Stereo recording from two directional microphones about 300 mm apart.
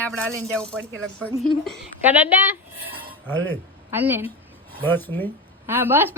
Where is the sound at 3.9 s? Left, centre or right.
Centre.